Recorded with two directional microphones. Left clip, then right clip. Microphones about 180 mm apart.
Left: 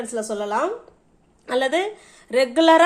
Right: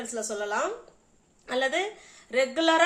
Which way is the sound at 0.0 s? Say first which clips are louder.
Left 6 dB; 50° left (ahead or behind).